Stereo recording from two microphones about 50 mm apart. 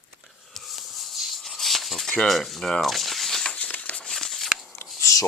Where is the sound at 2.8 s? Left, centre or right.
Centre.